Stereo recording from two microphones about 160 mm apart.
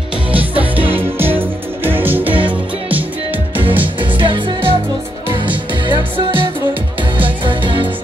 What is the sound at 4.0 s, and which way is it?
Music, 30° right (ahead or behind).